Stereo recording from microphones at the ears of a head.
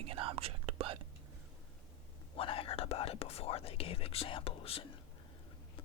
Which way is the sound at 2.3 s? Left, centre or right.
Left.